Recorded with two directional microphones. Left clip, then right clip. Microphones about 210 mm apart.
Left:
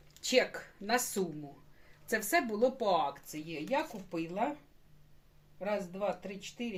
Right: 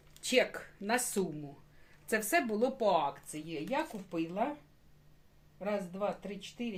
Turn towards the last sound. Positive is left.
turn(degrees=-5)  # may be behind; listen again after turning